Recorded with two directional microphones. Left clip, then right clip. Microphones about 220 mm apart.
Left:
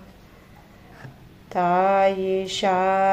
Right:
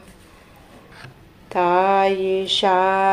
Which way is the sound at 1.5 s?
15° right (ahead or behind).